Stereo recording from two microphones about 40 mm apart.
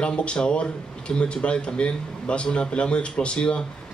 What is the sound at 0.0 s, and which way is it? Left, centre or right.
A man's voice, left.